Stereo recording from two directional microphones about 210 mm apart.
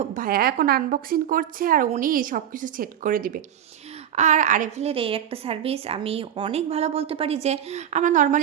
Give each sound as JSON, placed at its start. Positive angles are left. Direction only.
{"t": 0.0, "sound": "a woman's voice", "side_deg": -40}